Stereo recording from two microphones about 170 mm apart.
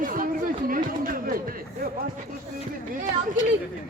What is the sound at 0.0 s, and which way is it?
Chatter, 55° right (ahead or behind).